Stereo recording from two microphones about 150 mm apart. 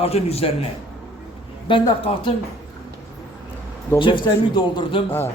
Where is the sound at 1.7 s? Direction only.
30° left (ahead or behind).